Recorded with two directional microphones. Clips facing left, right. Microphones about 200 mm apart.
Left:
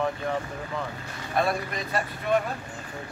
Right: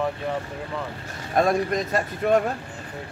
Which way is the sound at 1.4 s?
45° right (ahead or behind).